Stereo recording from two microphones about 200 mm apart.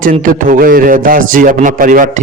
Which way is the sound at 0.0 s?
45° right (ahead or behind).